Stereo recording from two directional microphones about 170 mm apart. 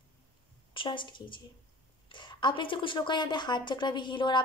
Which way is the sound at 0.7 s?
30° left (ahead or behind).